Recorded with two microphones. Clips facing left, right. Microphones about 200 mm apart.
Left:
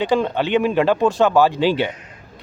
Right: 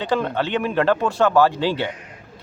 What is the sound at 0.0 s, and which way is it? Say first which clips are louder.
Speech: left 3 dB; 15° left (ahead or behind).